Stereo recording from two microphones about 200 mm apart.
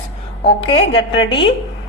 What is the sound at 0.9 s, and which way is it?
Speech, 25° left (ahead or behind).